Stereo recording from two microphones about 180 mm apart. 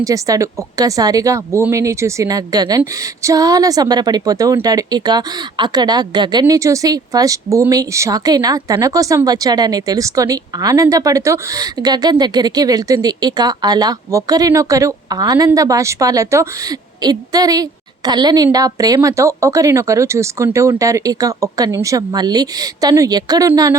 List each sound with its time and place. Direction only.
0.0 s speech: 20° right (ahead or behind)